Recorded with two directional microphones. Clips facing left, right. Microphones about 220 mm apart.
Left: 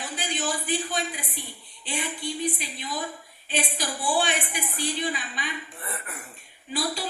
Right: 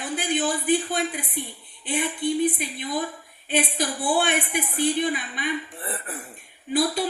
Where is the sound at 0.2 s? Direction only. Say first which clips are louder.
Right 5 dB; 55° right (ahead or behind).